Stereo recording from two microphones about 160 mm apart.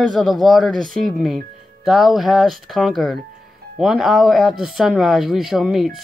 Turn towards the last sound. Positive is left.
turn(degrees=0)  # may be behind; listen again after turning